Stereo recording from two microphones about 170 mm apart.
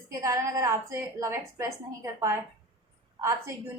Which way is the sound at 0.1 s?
20° right (ahead or behind).